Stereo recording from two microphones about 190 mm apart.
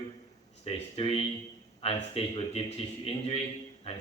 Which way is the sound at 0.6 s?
30° left (ahead or behind).